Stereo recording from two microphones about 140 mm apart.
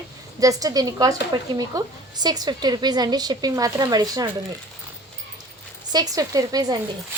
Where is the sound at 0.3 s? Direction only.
25° right (ahead or behind).